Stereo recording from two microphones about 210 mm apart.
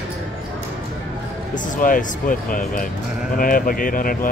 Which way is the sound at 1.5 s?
40° left (ahead or behind).